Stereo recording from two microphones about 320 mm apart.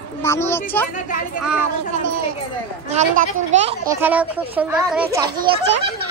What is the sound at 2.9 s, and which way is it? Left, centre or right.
Speech, right.